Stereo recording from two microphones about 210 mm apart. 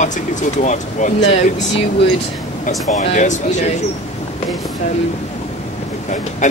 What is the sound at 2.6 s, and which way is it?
Speech, 35° left (ahead or behind).